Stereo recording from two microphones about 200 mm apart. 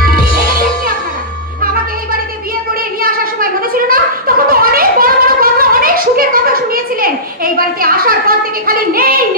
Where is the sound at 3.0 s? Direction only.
45° right (ahead or behind).